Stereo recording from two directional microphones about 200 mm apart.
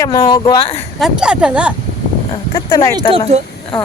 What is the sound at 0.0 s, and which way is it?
Speech, 20° left (ahead or behind).